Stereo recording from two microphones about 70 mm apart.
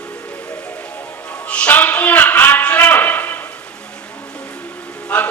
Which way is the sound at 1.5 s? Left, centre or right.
Centre.